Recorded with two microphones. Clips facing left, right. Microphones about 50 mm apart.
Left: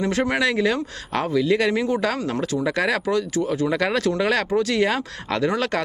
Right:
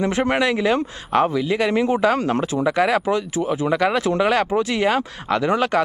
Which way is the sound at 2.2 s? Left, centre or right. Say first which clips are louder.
Right 3 dB; right.